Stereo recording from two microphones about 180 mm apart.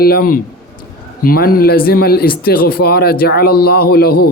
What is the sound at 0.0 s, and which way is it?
Speech, 55° left (ahead or behind).